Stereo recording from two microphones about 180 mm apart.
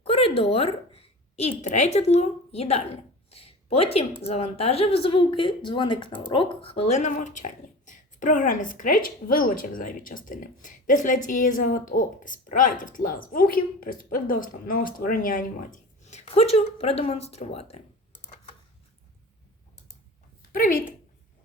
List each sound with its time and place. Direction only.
0.0 s a woman's voice: 30° left (ahead or behind)
20.5 s a woman's voice: 50° left (ahead or behind)